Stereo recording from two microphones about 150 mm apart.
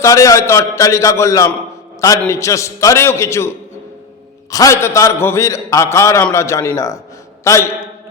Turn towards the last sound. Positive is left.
turn(degrees=20)  # may be behind; listen again after turning